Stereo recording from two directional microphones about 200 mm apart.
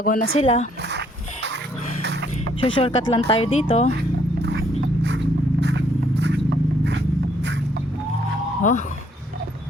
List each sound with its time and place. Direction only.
0.0 s speech: 40° left (ahead or behind)
0.9 s dog: 60° right (ahead or behind)
2.0 s chicken: 55° right (ahead or behind)
2.6 s speech: 25° left (ahead or behind)
5.0 s scrape: 60° right (ahead or behind)